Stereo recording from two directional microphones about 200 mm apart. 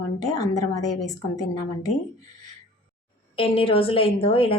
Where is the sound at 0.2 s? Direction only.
20° left (ahead or behind).